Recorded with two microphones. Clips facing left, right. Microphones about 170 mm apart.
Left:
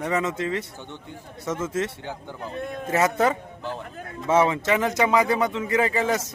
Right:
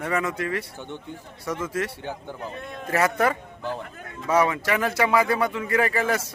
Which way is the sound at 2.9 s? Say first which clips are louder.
Left 1 dB; 20° left (ahead or behind).